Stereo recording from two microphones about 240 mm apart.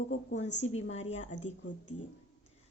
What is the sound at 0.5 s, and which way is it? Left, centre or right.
Speech, left.